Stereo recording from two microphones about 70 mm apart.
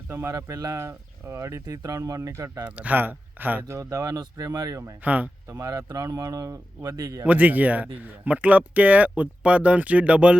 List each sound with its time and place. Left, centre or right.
0.3 s speech: right
0.8 s speech: right
2.6 s speech: right
3.8 s speech: right
5.0 s speech: right
5.5 s speech: right
7.3 s speech: right